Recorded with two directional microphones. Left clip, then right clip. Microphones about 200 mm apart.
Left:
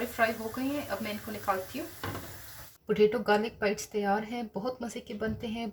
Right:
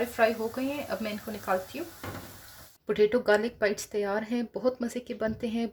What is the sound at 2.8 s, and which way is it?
Speech, 45° right (ahead or behind).